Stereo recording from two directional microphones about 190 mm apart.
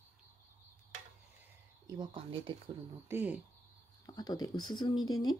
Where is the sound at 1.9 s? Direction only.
25° right (ahead or behind).